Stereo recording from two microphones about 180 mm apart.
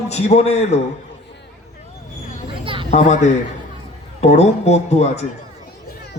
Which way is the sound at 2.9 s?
40° left (ahead or behind).